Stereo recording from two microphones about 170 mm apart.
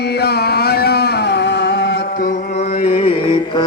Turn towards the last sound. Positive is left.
turn(degrees=30)  # may be behind; listen again after turning